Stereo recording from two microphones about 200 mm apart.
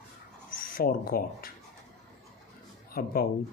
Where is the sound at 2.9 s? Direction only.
45° left (ahead or behind).